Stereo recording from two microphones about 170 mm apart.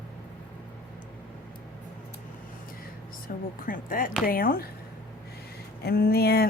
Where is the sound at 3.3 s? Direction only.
60° left (ahead or behind).